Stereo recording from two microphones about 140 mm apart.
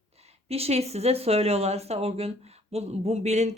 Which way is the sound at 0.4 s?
45° right (ahead or behind).